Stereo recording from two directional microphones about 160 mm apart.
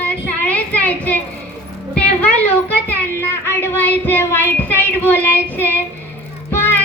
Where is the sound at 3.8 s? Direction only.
10° left (ahead or behind).